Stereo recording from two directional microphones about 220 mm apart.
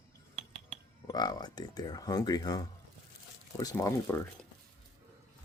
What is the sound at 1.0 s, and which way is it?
Speech, 15° left (ahead or behind).